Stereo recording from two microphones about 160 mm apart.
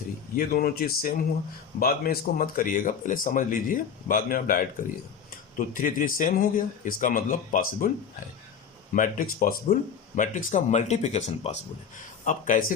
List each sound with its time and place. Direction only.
0.3 s speech: 65° left (ahead or behind)
9.0 s speech: 60° left (ahead or behind)
10.2 s speech: 50° left (ahead or behind)
12.2 s speech: 55° left (ahead or behind)